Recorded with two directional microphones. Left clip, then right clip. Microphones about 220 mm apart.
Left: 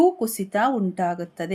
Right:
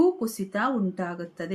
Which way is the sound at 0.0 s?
35° left (ahead or behind).